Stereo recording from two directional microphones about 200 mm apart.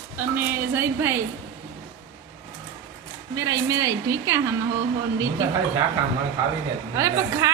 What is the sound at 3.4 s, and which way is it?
A woman's voice, 15° right (ahead or behind).